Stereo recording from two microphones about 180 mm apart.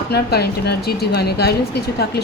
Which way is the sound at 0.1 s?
65° left (ahead or behind).